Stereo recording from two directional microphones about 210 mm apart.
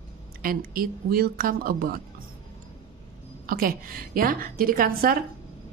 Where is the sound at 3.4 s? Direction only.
45° right (ahead or behind).